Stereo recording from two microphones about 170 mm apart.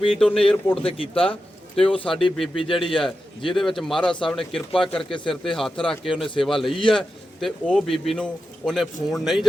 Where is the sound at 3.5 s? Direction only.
Centre (ahead or behind).